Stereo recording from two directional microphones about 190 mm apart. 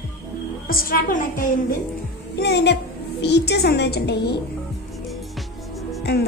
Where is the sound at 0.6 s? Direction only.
50° left (ahead or behind).